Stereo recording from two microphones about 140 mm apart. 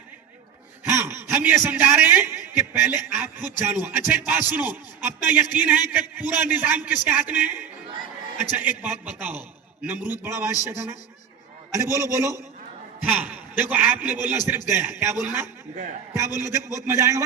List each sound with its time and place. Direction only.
0.9 s a man's voice: 20° right (ahead or behind)
11.7 s a man's voice: 20° right (ahead or behind)